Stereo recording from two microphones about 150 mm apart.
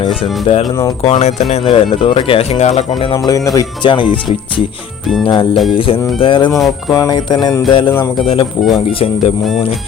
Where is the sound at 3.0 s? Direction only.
30° left (ahead or behind).